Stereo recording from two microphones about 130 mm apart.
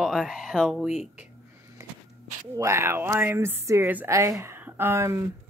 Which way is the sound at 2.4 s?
25° right (ahead or behind).